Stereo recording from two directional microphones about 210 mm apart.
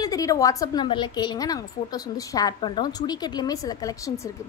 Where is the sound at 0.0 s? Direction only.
15° left (ahead or behind).